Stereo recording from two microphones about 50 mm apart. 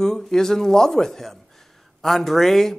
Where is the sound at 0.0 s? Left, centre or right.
Centre.